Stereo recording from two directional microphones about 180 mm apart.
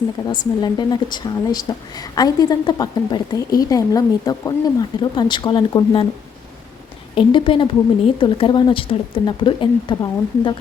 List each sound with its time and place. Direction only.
0.3 s a woman's voice: 25° left (ahead or behind)
7.2 s a woman's voice: 30° left (ahead or behind)